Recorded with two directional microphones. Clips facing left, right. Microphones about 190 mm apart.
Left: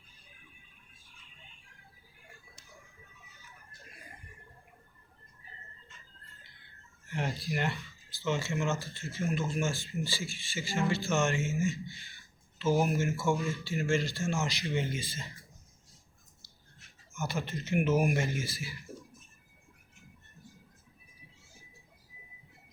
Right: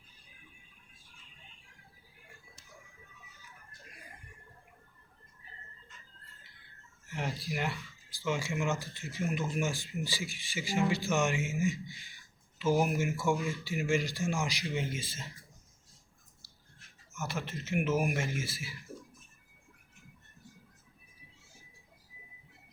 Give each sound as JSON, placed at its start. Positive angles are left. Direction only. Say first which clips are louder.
{"t": 3.7, "sound": "music", "louder": "left 1 dB", "side_deg": -15}
{"t": 7.1, "sound": "speech", "louder": "left 2 dB", "side_deg": 0}
{"t": 8.2, "sound": "speech", "louder": "left 1 dB", "side_deg": -10}
{"t": 14.6, "sound": "speech", "louder": "left 2 dB", "side_deg": 0}
{"t": 17.2, "sound": "speech", "louder": "left 2 dB", "side_deg": 0}